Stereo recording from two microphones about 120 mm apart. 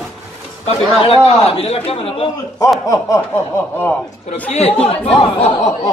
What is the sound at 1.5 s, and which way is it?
Speech, 55° left (ahead or behind).